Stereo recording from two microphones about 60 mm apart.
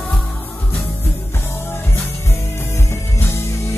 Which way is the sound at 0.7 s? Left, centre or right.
Left.